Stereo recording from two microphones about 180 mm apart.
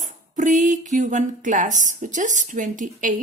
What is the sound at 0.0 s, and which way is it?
Speech, 45° right (ahead or behind).